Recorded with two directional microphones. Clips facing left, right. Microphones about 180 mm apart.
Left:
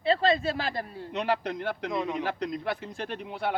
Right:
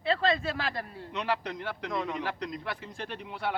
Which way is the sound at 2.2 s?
50° left (ahead or behind).